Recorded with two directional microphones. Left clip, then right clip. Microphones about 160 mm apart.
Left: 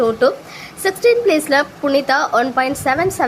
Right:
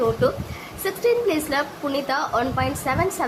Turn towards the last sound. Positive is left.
turn(degrees=30)  # may be behind; listen again after turning